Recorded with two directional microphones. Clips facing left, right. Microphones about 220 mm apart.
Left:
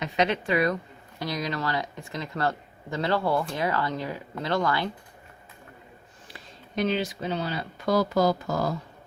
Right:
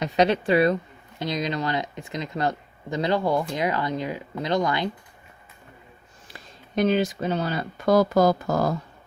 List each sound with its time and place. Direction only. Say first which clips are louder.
0.0 s a woman's voice: right 5 dB; 35° right (ahead or behind); by 4.9 s 20° right (ahead or behind)
6.7 s speech: right 5 dB; 45° right (ahead or behind)